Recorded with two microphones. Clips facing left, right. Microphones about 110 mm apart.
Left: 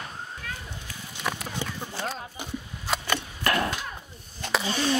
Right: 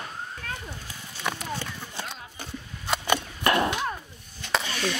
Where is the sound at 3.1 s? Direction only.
20° right (ahead or behind).